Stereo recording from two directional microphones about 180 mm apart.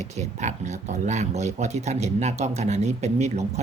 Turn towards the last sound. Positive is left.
turn(degrees=-40)  # may be behind; listen again after turning